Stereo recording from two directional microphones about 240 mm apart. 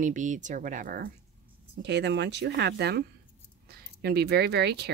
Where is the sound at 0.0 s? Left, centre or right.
Right.